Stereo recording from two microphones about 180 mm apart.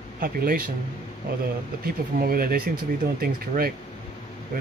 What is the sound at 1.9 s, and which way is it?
Speech, 55° right (ahead or behind).